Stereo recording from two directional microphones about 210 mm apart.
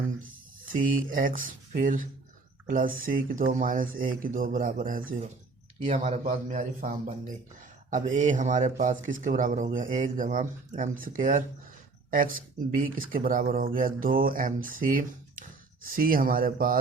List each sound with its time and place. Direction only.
0.6 s speech: 40° right (ahead or behind)